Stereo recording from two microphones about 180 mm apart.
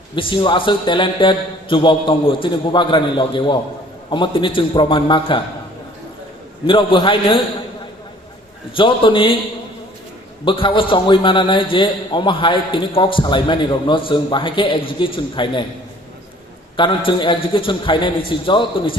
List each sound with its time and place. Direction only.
0.2 s a man's voice: 25° left (ahead or behind)
6.7 s a man's voice: 25° left (ahead or behind)
8.7 s a man's voice: 30° left (ahead or behind)
10.4 s a man's voice: 30° left (ahead or behind)
16.7 s a man's voice: 25° left (ahead or behind)